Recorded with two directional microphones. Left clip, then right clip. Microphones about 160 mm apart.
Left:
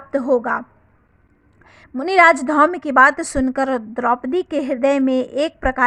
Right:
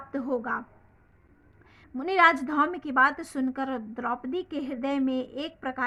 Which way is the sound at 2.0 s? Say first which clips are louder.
Left 9 dB; 40° left (ahead or behind).